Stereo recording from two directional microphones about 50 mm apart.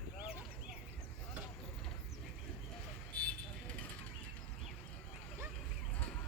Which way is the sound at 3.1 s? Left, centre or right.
Left.